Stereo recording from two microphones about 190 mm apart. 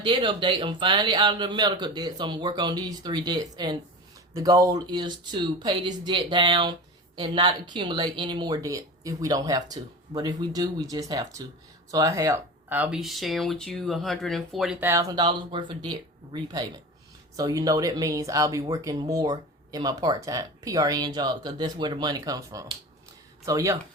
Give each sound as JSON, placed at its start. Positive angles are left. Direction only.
{"t": 0.0, "sound": "speech", "side_deg": -25}